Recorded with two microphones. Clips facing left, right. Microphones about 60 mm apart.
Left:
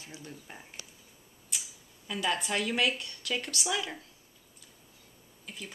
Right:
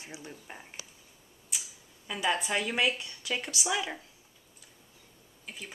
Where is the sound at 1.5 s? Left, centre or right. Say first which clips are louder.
Even; centre.